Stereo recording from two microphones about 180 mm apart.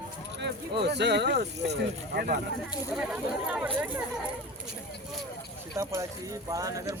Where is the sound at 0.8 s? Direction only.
70° right (ahead or behind).